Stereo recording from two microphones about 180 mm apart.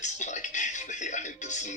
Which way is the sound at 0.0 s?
40° left (ahead or behind).